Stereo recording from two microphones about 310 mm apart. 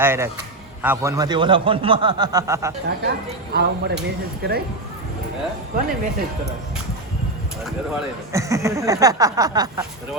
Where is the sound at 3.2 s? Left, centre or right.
Right.